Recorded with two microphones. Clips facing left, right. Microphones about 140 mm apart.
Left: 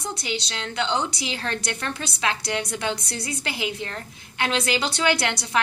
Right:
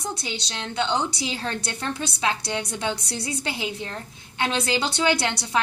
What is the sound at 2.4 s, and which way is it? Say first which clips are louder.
Speech: left 1 dB; 25° right (ahead or behind).